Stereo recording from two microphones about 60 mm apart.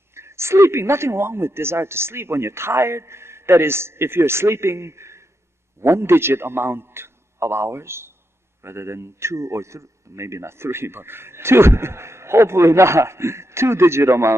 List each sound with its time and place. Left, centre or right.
0.1 s a man's voice: right